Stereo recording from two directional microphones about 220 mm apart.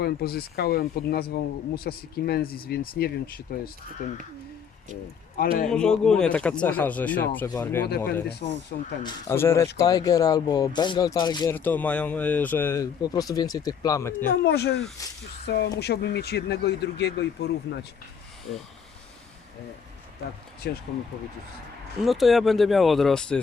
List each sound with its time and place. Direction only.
0.0 s speech: 45° left (ahead or behind)
5.6 s speech: 5° left (ahead or behind)
7.9 s speech: 45° left (ahead or behind)
8.4 s speech: 35° left (ahead or behind)
9.0 s speech: 10° left (ahead or behind)
11.5 s speech: 10° left (ahead or behind)
14.3 s speech: 45° left (ahead or behind)
15.0 s speech: 15° left (ahead or behind)
15.4 s speech: 50° left (ahead or behind)
20.7 s speech: 50° left (ahead or behind)
22.0 s speech: centre (ahead or behind)